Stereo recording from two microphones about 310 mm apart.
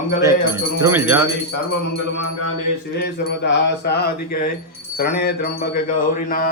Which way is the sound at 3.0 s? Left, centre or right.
Left.